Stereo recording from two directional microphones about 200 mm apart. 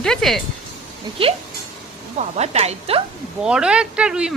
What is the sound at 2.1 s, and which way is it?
Speech, 35° right (ahead or behind).